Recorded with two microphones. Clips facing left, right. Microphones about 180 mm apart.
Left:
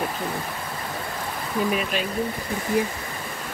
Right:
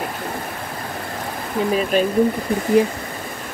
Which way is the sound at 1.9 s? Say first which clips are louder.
Right 9 dB; 45° right (ahead or behind).